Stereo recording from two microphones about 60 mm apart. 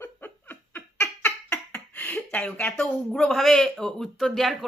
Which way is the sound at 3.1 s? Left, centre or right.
Centre.